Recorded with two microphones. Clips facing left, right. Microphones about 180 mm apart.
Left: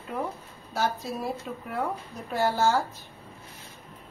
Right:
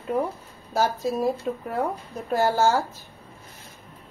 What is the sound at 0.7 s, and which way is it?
Speech, 40° right (ahead or behind).